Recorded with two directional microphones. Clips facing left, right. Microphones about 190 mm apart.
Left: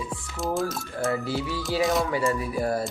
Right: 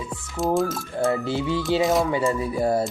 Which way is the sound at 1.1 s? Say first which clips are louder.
Right 4 dB; 25° right (ahead or behind).